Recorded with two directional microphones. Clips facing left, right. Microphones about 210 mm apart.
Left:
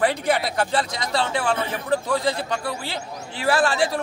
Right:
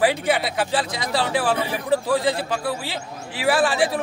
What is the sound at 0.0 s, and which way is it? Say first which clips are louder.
Speech: right 1 dB; 5° right (ahead or behind).